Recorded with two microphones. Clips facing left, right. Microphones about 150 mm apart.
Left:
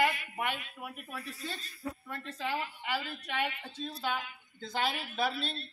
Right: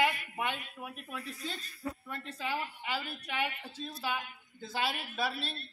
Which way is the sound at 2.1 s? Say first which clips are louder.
Left 2 dB; 15° right (ahead or behind).